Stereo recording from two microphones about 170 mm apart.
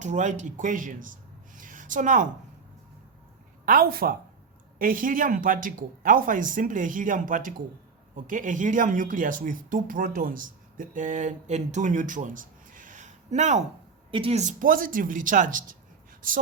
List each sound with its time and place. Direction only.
0.0 s speech: 45° right (ahead or behind)
1.5 s a sound: 50° right (ahead or behind)
3.7 s speech: 60° right (ahead or behind); by 13.7 s 45° right (ahead or behind)
14.1 s speech: 35° right (ahead or behind); by 15.6 s 50° right (ahead or behind)